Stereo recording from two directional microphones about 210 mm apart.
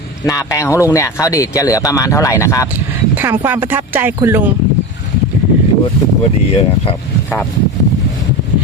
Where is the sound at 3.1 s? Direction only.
10° right (ahead or behind).